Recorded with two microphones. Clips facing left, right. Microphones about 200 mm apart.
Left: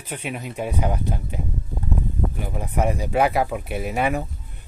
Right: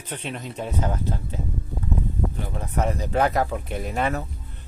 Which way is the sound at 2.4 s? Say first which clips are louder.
Left 2 dB; 10° left (ahead or behind).